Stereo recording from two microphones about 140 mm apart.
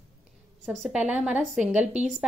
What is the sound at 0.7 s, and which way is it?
Speech, centre (ahead or behind).